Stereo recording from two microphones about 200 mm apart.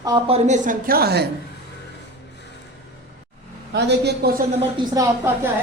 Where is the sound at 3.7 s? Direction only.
60° right (ahead or behind).